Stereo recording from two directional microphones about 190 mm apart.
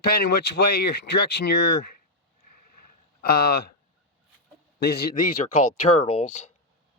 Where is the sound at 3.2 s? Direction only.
55° left (ahead or behind).